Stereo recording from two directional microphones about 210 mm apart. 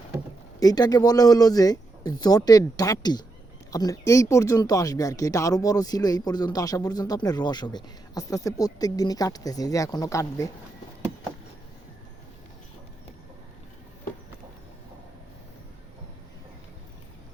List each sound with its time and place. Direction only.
0.6 s speech: 15° left (ahead or behind)